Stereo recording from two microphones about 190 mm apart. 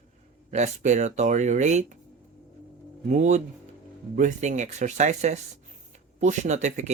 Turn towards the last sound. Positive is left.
turn(degrees=-40)  # may be behind; listen again after turning